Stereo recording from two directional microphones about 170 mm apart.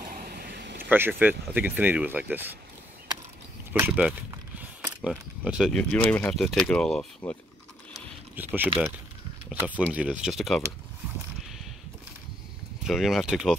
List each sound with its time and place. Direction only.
0.1 s a sound: 60° right (ahead or behind)
0.8 s speech: 10° right (ahead or behind)
3.9 s mechanisms: 10° right (ahead or behind)
5.4 s speech: 5° right (ahead or behind)
5.7 s speech: 5° left (ahead or behind)
8.5 s speech: 10° right (ahead or behind)
12.8 s speech: centre (ahead or behind)